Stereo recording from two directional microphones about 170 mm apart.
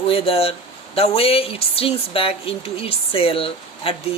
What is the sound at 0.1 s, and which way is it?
Speech, 35° left (ahead or behind).